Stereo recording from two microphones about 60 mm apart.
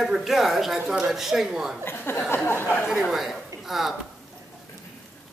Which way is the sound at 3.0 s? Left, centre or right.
Centre.